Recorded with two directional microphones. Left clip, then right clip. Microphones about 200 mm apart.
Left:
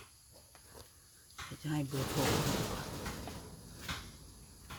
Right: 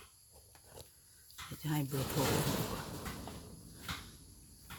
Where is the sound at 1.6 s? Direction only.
25° right (ahead or behind).